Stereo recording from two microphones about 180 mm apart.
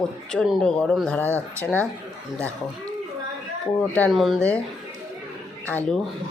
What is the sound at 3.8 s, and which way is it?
Speech, 5° left (ahead or behind).